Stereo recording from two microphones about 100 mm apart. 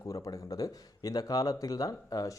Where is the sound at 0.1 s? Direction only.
35° left (ahead or behind).